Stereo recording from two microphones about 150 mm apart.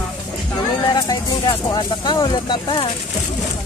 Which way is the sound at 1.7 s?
30° left (ahead or behind).